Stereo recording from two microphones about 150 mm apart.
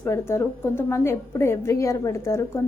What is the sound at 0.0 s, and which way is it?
A woman's voice, 15° left (ahead or behind).